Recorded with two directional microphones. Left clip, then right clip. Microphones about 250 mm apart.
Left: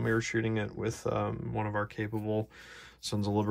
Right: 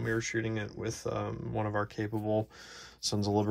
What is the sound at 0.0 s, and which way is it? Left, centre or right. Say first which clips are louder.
Speech: left 2 dB; centre.